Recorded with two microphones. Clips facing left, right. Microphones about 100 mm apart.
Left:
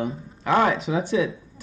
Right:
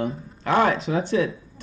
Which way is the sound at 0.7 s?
5° left (ahead or behind).